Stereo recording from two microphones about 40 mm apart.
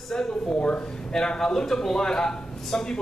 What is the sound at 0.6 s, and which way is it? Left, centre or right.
Speech, left.